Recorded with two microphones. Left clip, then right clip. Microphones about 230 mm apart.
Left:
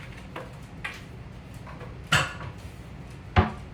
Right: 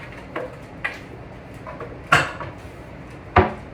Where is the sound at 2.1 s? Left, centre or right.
Centre.